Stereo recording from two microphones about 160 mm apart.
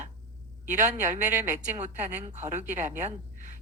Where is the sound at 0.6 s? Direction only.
50° right (ahead or behind).